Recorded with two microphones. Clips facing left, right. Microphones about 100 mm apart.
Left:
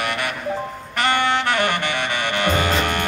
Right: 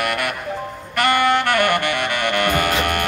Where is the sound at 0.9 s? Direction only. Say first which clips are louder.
Right 3 dB; 50° right (ahead or behind).